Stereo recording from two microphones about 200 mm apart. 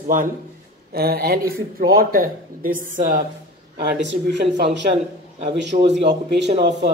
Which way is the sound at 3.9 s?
60° right (ahead or behind).